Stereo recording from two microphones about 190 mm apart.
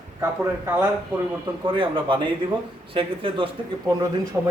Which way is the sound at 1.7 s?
25° right (ahead or behind).